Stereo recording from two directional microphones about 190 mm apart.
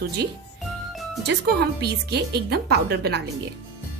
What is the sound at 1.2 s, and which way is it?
Speech, 60° right (ahead or behind).